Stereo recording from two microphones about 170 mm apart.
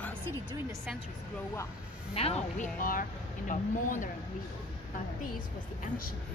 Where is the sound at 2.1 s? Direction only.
35° left (ahead or behind).